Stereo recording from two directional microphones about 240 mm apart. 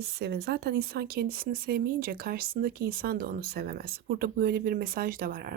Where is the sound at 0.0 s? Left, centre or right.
Right.